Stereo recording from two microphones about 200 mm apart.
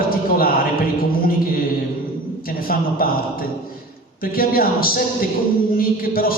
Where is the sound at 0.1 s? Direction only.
50° left (ahead or behind).